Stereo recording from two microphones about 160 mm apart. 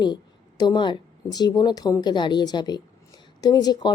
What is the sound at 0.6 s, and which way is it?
A woman's voice, 30° left (ahead or behind).